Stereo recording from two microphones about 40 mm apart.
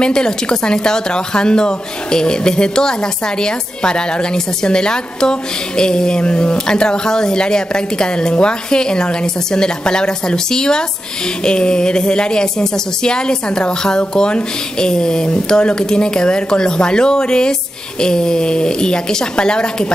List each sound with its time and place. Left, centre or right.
0.0 s speech: centre